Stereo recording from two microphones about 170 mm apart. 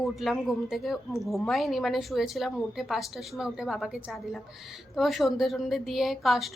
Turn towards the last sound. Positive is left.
turn(degrees=0)  # may be behind; listen again after turning